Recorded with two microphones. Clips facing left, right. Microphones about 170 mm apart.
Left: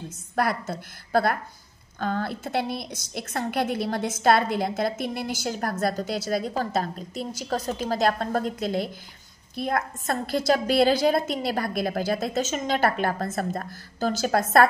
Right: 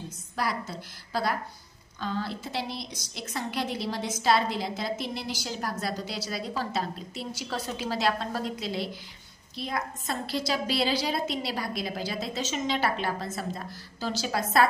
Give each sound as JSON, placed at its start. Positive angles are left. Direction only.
{"t": 0.4, "sound": "a woman's voice", "side_deg": 55}